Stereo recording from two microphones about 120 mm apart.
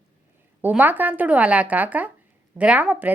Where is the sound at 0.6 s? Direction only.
15° right (ahead or behind).